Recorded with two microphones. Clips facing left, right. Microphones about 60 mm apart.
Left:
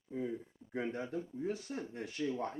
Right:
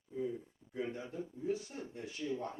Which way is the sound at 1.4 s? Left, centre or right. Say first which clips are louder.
Even; left.